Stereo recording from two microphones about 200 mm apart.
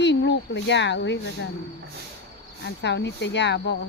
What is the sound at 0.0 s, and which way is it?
Speech, 60° left (ahead or behind).